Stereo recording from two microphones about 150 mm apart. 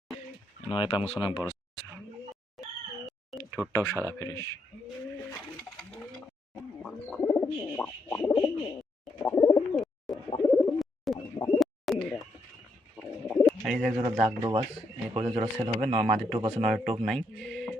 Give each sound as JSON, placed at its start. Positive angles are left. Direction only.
{"t": 0.7, "sound": "speech", "side_deg": 35}
{"t": 3.7, "sound": "speech", "side_deg": 20}
{"t": 6.8, "sound": "bird", "side_deg": 5}
{"t": 9.7, "sound": "bird", "side_deg": 0}
{"t": 10.2, "sound": "bird", "side_deg": 30}
{"t": 10.8, "sound": "bird", "side_deg": 0}
{"t": 11.3, "sound": "bird", "side_deg": 20}
{"t": 11.6, "sound": "bird", "side_deg": 0}
{"t": 13.2, "sound": "bird", "side_deg": 0}
{"t": 13.7, "sound": "speech", "side_deg": -5}
{"t": 13.9, "sound": "speech", "side_deg": -35}
{"t": 17.1, "sound": "speech", "side_deg": 5}